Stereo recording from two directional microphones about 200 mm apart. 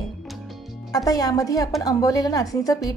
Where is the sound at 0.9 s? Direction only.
20° left (ahead or behind).